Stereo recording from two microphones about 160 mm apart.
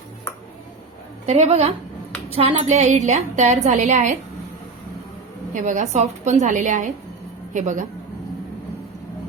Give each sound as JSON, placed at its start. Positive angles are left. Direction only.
{"t": 1.3, "sound": "a woman's voice", "side_deg": -40}
{"t": 5.5, "sound": "a woman's voice", "side_deg": -50}